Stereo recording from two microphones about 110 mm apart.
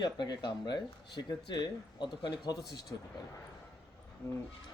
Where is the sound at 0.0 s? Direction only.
40° left (ahead or behind).